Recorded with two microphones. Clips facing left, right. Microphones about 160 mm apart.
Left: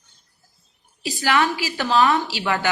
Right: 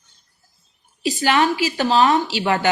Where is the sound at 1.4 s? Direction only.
25° right (ahead or behind).